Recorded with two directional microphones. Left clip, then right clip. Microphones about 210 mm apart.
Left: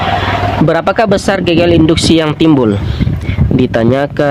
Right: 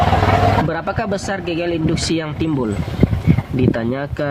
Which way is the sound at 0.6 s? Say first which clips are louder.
Left 11 dB; 40° left (ahead or behind).